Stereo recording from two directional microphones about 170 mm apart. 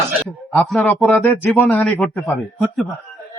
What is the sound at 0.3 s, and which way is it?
A man's voice, centre (ahead or behind).